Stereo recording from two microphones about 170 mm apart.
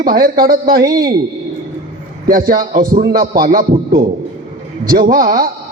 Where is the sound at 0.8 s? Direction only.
20° right (ahead or behind).